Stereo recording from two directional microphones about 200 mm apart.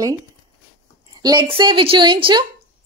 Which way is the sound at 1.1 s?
20° right (ahead or behind).